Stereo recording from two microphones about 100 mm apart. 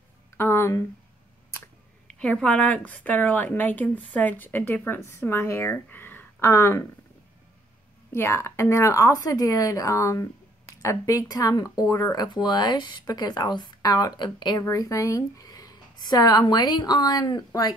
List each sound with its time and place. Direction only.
0.4 s a sound: 25° left (ahead or behind)
2.0 s a sound: 10° left (ahead or behind)
2.4 s a woman's voice: 15° left (ahead or behind)
8.1 s a woman's voice: 25° left (ahead or behind)
12.3 s speech: 45° left (ahead or behind)
14.6 s a woman's voice: 35° left (ahead or behind)